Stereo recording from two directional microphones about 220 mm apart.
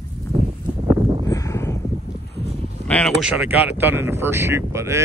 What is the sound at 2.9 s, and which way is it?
Speech, 5° left (ahead or behind).